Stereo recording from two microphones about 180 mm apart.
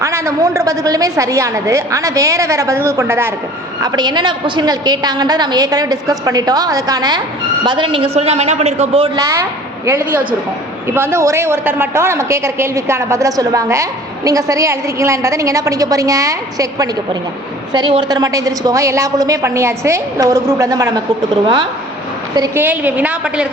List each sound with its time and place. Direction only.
0.0 s a woman's voice: 15° right (ahead or behind); by 9.0 s 35° right (ahead or behind)
10.8 s a woman's voice: 15° right (ahead or behind)
22.4 s a woman's voice: 10° right (ahead or behind)